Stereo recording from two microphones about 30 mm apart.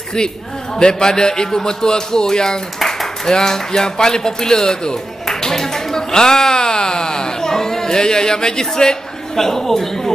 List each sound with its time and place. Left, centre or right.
0.7 s a man's voice: left
9.3 s a man's voice: centre